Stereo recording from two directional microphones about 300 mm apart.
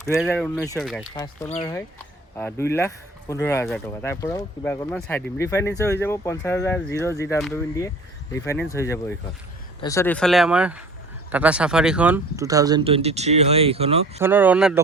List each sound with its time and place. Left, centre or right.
0.2 s speech: centre
1.1 s speech: centre
7.3 s speech: centre
14.2 s speech: centre